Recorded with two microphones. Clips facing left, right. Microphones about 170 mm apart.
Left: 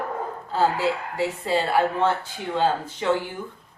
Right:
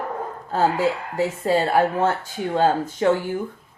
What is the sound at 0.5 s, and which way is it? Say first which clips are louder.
Speech: right 2 dB; 45° right (ahead or behind).